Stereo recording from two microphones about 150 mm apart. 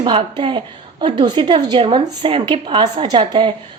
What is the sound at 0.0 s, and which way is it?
A woman's voice, 35° right (ahead or behind).